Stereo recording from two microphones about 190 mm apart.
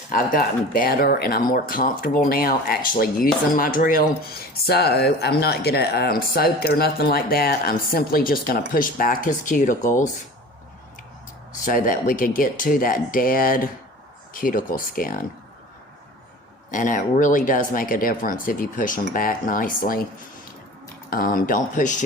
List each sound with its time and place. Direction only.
0.1 s speech: 45° left (ahead or behind)
11.6 s speech: 45° left (ahead or behind)
16.7 s speech: 45° left (ahead or behind)
21.1 s speech: 45° left (ahead or behind)